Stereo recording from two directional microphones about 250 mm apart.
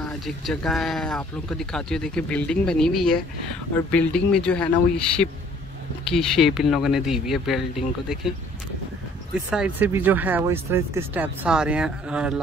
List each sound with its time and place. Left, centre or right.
0.0 s speech: centre
9.5 s speech: centre